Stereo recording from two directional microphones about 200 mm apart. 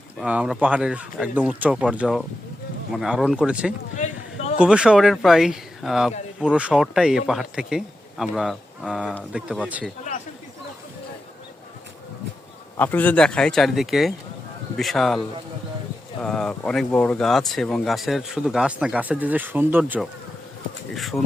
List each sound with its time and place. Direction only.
0.2 s speech: 5° right (ahead or behind)
4.0 s a sound: 40° left (ahead or behind)
4.5 s speech: 5° right (ahead or behind)
12.7 s speech: 10° left (ahead or behind)
16.2 s speech: 5° left (ahead or behind)